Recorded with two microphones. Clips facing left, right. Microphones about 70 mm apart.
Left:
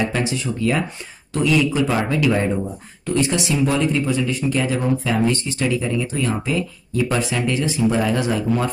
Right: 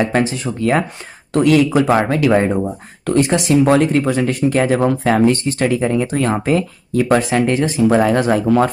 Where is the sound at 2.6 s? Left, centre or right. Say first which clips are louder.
Right 6 dB; right.